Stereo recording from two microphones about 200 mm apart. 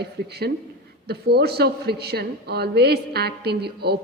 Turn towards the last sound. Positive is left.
turn(degrees=-55)  # may be behind; listen again after turning